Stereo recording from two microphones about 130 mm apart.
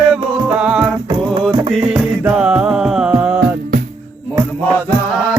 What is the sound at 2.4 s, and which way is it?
Music, 10° right (ahead or behind).